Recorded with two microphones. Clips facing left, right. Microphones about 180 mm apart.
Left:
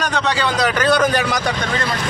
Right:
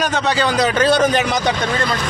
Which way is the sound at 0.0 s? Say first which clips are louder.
Right 2 dB; 15° right (ahead or behind).